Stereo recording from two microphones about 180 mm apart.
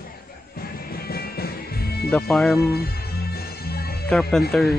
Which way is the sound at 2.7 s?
60° left (ahead or behind).